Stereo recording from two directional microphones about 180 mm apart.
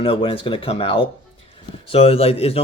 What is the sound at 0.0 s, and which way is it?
A man's voice, 30° left (ahead or behind).